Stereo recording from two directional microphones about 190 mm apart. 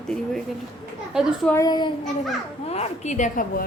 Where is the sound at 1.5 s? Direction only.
20° left (ahead or behind).